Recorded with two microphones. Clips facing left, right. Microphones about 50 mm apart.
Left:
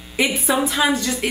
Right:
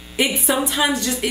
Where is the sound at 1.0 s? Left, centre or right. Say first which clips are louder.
Even; left.